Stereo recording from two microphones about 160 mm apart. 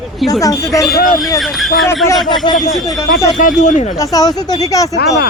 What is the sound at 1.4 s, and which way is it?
Speech, centre (ahead or behind).